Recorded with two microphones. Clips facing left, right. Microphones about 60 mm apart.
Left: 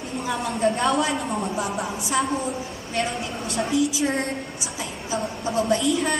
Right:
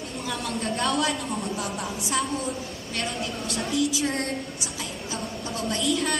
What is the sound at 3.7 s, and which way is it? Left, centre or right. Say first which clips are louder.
Speech: left 2 dB; right.